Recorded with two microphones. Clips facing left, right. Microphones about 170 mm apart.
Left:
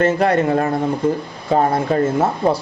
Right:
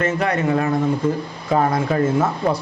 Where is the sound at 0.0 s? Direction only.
30° left (ahead or behind).